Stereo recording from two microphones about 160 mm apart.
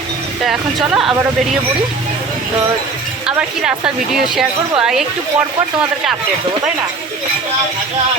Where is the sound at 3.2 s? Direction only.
5° right (ahead or behind).